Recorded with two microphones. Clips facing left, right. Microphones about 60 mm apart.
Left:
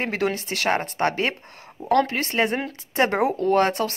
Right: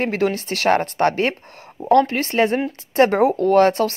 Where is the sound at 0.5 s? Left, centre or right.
Right.